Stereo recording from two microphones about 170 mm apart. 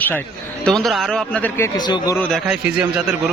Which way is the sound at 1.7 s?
25° left (ahead or behind).